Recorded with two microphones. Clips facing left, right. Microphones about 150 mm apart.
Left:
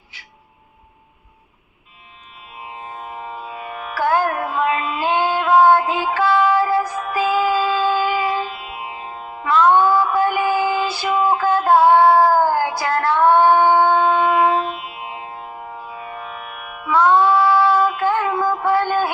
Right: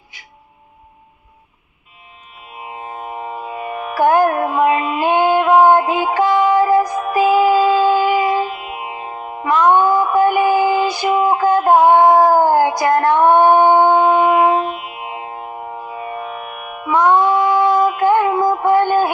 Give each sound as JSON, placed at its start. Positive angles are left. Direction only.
{"t": 2.6, "sound": "music", "side_deg": -15}